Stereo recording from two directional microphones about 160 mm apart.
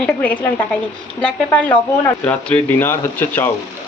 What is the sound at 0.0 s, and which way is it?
A woman's voice, 5° left (ahead or behind).